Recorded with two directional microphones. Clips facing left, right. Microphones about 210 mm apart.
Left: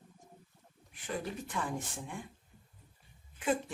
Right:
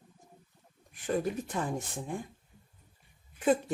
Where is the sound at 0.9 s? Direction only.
45° right (ahead or behind).